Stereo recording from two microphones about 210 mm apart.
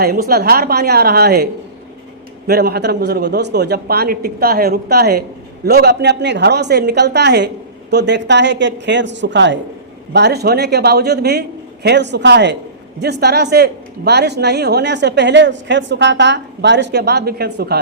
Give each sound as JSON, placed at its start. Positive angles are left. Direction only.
{"t": 0.0, "sound": "speech", "side_deg": -45}
{"t": 2.5, "sound": "speech", "side_deg": -50}